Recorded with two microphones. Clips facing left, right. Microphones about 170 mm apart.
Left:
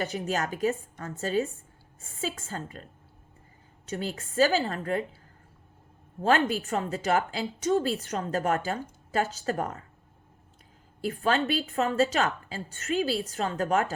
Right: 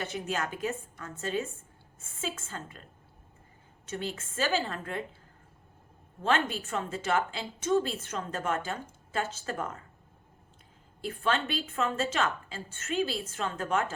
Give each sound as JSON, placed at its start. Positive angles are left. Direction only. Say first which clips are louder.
{"t": 0.0, "sound": "a woman's voice", "louder": "left 4 dB", "side_deg": 40}
{"t": 3.8, "sound": "a woman's voice", "louder": "left 3 dB", "side_deg": 35}
{"t": 6.2, "sound": "a woman's voice", "louder": "left 5 dB", "side_deg": 35}
{"t": 11.1, "sound": "a woman's voice", "louder": "left 4 dB", "side_deg": 40}